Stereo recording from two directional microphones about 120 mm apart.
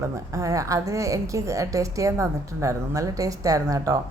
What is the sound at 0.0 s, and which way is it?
A woman's voice, 25° right (ahead or behind).